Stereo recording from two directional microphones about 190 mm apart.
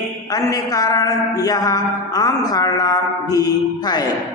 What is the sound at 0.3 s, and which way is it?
A man's voice, 20° left (ahead or behind).